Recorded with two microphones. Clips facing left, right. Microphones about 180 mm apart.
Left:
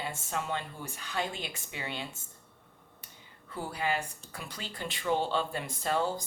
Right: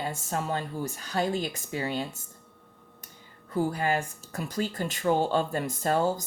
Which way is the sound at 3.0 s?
45° right (ahead or behind).